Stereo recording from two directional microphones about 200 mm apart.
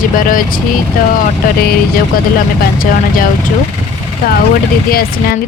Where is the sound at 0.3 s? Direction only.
45° left (ahead or behind).